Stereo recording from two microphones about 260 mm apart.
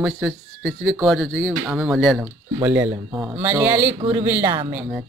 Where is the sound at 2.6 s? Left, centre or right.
Centre.